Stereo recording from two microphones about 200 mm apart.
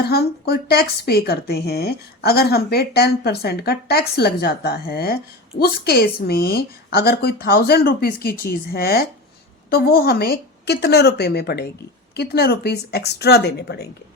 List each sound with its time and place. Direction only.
0.0 s a woman's voice: 50° left (ahead or behind)